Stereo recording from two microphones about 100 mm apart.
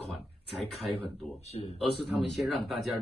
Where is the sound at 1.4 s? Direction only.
90° left.